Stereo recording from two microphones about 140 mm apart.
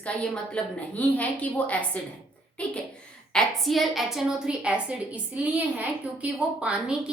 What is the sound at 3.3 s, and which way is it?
A woman's voice, centre (ahead or behind).